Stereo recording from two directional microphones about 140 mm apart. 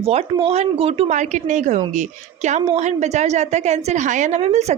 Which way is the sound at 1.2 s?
60° right (ahead or behind).